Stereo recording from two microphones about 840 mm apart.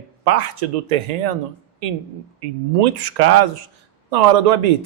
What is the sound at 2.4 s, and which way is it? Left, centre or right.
Speech, right.